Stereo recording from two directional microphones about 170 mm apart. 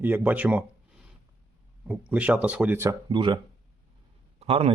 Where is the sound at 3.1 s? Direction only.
25° right (ahead or behind).